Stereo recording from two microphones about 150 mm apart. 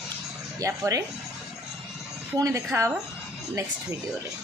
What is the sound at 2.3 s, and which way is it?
Speech, 20° right (ahead or behind).